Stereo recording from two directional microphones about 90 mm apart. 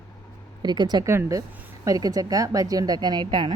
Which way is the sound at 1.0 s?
35° right (ahead or behind).